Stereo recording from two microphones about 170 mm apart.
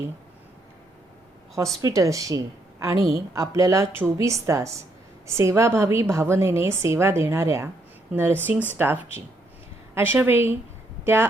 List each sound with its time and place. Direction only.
1.5 s a woman's voice: 20° right (ahead or behind)